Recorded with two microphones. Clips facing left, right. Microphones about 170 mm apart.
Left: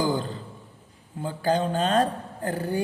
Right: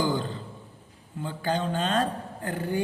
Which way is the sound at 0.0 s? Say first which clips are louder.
Left 1 dB; 40° left (ahead or behind).